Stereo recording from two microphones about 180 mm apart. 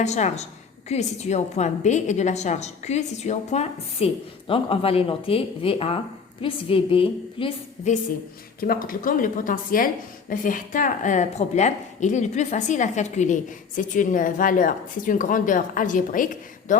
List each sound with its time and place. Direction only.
0.0 s a woman's voice: 40° left (ahead or behind)
8.6 s speech: 55° left (ahead or behind)